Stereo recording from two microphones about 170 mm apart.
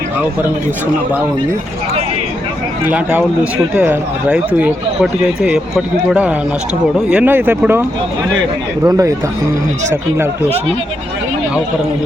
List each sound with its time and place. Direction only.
2.8 s speech: 10° right (ahead or behind)
8.9 s speech: 20° right (ahead or behind)